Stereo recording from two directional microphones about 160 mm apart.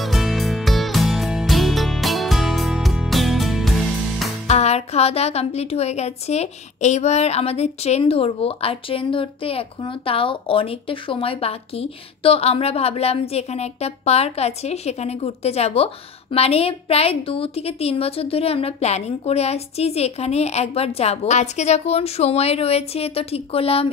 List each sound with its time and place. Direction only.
0.0 s music: centre (ahead or behind)
4.5 s speech: 40° left (ahead or behind)